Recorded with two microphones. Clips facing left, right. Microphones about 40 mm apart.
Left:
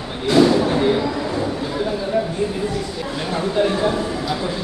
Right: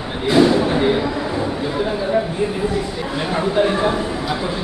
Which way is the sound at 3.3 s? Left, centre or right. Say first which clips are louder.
Right 2 dB; right.